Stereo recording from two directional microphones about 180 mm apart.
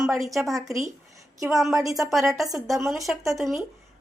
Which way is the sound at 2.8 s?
Centre (ahead or behind).